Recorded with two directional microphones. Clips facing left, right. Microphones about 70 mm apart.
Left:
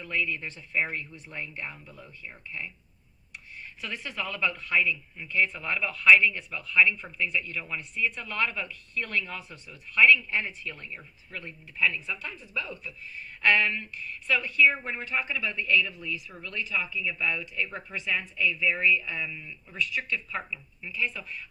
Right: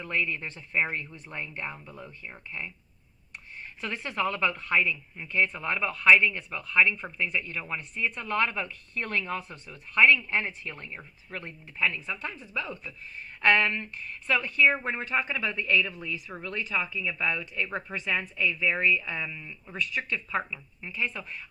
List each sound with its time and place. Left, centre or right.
0.0 s speech: right
3.8 s speech: right
5.3 s speech: right
5.5 s speech: right
19.7 s speech: right